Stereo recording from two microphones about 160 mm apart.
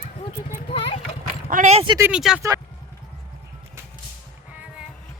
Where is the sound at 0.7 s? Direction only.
35° left (ahead or behind).